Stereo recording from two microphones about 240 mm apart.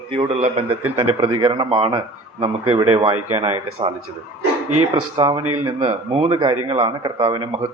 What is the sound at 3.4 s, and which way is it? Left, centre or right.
Speech, right.